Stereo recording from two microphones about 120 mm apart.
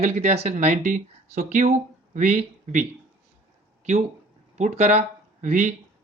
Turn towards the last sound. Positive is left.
turn(degrees=-90)